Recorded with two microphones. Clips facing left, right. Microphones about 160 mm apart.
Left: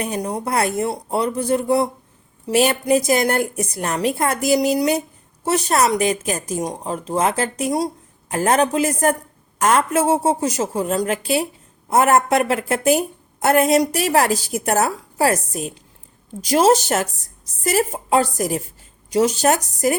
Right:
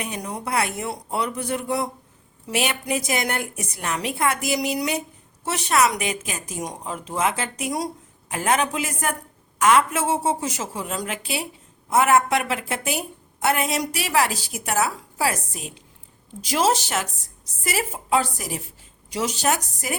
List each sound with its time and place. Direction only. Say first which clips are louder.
0.0 s a woman's voice: left 6 dB; 35° left (ahead or behind)